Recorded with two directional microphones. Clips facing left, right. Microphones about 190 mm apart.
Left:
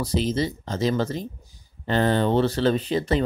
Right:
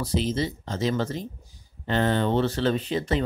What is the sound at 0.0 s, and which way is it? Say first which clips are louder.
Speech: left 2 dB; 40° left (ahead or behind).